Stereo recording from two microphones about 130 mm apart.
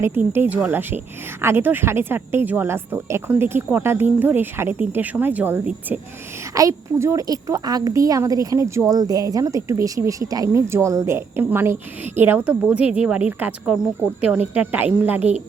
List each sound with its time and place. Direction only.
0.3 s speech: 15° right (ahead or behind)
6.5 s a woman's voice: 25° right (ahead or behind)